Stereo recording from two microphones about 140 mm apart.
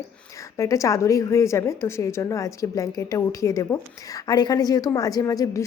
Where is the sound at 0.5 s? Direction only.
20° left (ahead or behind).